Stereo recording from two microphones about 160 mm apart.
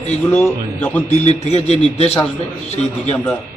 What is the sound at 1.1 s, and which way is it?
A man's voice, 45° left (ahead or behind).